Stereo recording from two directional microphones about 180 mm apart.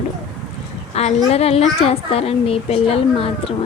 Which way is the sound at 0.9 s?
35° left (ahead or behind).